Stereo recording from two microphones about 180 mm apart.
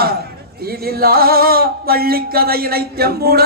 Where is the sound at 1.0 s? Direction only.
55° right (ahead or behind).